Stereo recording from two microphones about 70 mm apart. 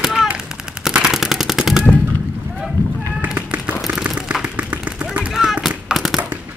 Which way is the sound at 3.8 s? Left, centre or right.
Centre.